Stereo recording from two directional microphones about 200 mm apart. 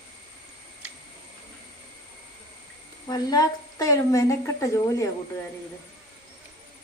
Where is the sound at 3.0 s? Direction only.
20° left (ahead or behind).